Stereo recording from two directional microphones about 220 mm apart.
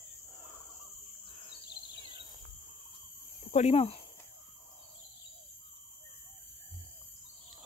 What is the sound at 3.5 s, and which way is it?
Speech, 30° left (ahead or behind).